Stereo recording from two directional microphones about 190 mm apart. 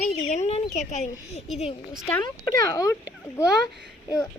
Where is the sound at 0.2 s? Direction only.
35° left (ahead or behind).